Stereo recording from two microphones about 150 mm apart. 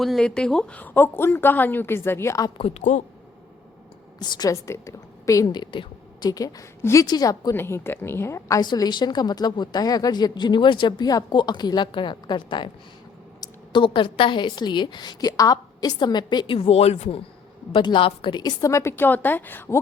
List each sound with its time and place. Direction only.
0.0 s speech: 5° left (ahead or behind); by 2.5 s 20° left (ahead or behind)
2.6 s a woman's voice: 45° left (ahead or behind)
4.2 s a woman's voice: 25° left (ahead or behind); by 17.2 s 45° left (ahead or behind)
17.7 s a woman's voice: 35° left (ahead or behind); by 19.8 s 15° left (ahead or behind)